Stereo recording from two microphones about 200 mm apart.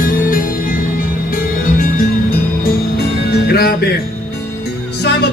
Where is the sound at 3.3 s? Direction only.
50° left (ahead or behind).